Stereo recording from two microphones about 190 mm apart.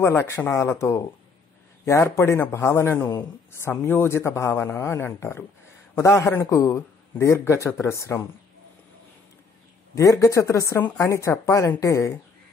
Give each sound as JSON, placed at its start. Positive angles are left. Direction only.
{"t": 0.1, "sound": "speech", "side_deg": 10}
{"t": 9.9, "sound": "speech", "side_deg": 15}